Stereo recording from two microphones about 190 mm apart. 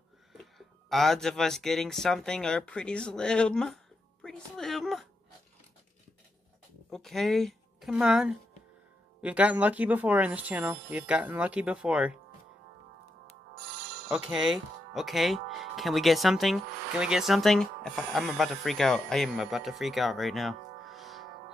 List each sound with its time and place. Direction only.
0.3 s speech: centre (ahead or behind)
6.9 s a woman's voice: centre (ahead or behind)
13.7 s music: 60° right (ahead or behind)
14.1 s speech: centre (ahead or behind)